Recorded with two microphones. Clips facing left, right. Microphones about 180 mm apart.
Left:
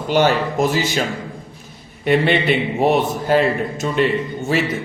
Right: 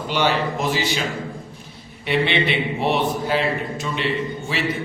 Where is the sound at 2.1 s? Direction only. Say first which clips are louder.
Left 5 dB; 45° left (ahead or behind).